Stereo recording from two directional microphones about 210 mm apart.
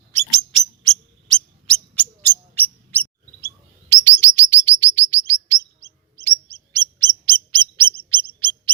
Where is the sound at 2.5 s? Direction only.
10° left (ahead or behind).